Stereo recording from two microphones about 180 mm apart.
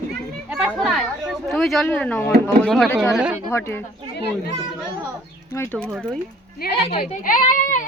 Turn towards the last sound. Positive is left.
turn(degrees=45)  # may be behind; listen again after turning